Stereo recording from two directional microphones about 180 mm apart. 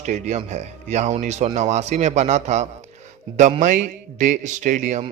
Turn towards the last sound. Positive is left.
turn(degrees=-40)  # may be behind; listen again after turning